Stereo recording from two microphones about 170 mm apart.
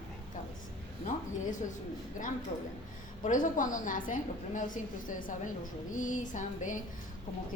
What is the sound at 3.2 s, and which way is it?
A woman's voice, 50° left (ahead or behind).